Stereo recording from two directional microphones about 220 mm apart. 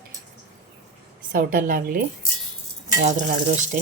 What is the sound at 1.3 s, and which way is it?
Speech, 40° right (ahead or behind).